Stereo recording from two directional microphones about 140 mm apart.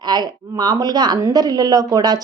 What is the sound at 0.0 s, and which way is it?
Speech, 30° right (ahead or behind).